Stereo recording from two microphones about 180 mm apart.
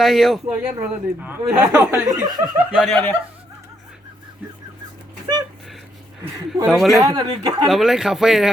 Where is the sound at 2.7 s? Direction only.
5° right (ahead or behind).